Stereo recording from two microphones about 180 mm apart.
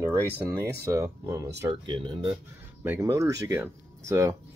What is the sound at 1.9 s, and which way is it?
Speech, 30° right (ahead or behind).